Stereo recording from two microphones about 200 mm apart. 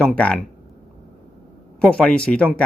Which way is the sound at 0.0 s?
5° left (ahead or behind).